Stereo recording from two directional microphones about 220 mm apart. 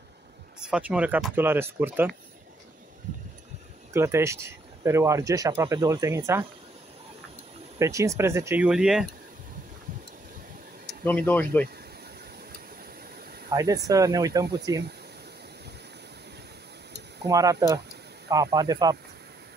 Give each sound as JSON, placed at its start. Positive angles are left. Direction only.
{"t": 0.6, "sound": "speech", "side_deg": -5}
{"t": 3.9, "sound": "speech", "side_deg": -10}
{"t": 7.8, "sound": "speech", "side_deg": -15}
{"t": 10.9, "sound": "speech", "side_deg": 5}
{"t": 13.5, "sound": "speech", "side_deg": -15}
{"t": 17.3, "sound": "speech", "side_deg": -15}